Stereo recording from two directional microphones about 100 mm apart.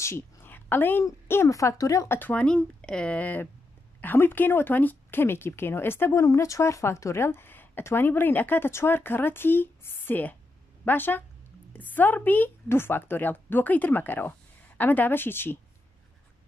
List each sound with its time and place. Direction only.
0.0 s a sound: 25° left (ahead or behind)
1.0 s speech: 25° left (ahead or behind)
2.1 s a woman's voice: 15° left (ahead or behind)